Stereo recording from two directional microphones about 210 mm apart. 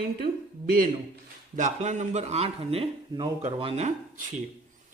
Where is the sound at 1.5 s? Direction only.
35° right (ahead or behind).